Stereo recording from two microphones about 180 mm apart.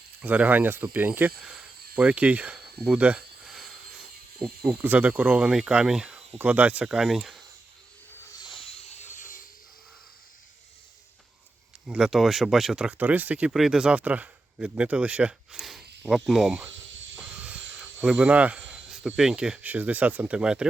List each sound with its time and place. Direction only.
0.2 s speech: 10° right (ahead or behind)
8.4 s a sound: 35° left (ahead or behind)
11.9 s speech: 5° right (ahead or behind)
16.7 s snake: 90° right
17.4 s speech: 5° right (ahead or behind)